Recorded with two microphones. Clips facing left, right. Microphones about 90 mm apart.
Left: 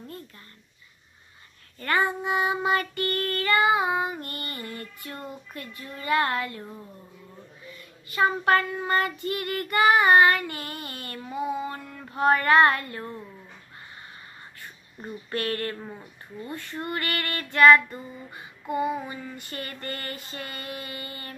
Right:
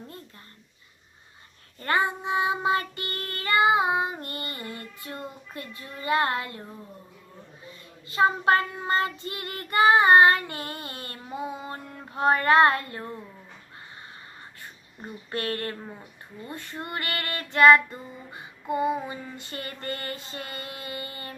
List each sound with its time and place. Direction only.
1.8 s child singing: 20° right (ahead or behind)
7.6 s child singing: 25° right (ahead or behind)
15.0 s child singing: 25° right (ahead or behind)